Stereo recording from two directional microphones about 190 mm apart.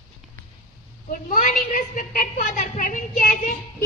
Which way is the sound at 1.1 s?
45° left (ahead or behind).